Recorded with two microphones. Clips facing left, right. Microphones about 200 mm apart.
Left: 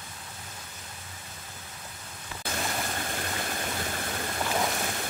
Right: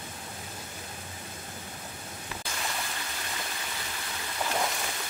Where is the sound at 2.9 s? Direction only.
50° left (ahead or behind).